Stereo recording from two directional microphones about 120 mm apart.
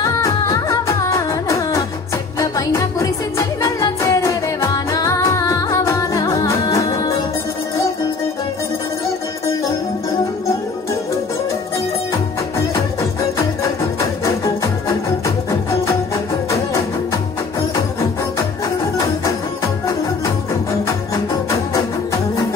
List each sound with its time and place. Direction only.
0.0 s music: 25° left (ahead or behind)
14.2 s music: 25° left (ahead or behind)